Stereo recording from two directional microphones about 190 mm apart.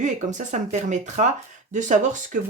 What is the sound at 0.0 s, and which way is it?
A woman's voice, 40° right (ahead or behind).